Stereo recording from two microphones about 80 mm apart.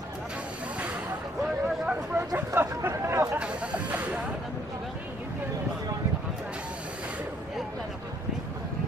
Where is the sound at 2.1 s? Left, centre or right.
Right.